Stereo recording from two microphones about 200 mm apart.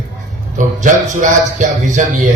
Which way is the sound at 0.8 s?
40° right (ahead or behind).